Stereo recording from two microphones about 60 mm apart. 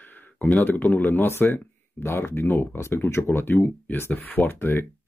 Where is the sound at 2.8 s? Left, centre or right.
Left.